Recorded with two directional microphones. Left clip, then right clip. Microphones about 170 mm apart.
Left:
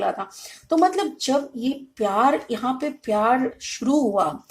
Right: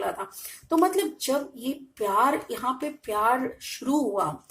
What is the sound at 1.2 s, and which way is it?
A woman's voice, 30° left (ahead or behind).